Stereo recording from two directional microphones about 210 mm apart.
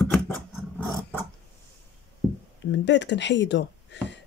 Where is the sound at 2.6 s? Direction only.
55° left (ahead or behind).